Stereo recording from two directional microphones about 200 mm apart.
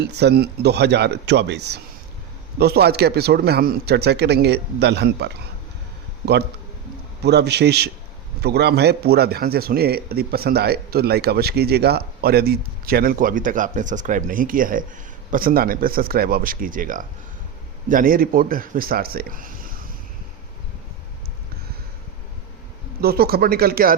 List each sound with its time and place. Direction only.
0.0 s a man's voice: 55° right (ahead or behind)
7.3 s a man's voice: 55° right (ahead or behind)
23.0 s a man's voice: 50° right (ahead or behind)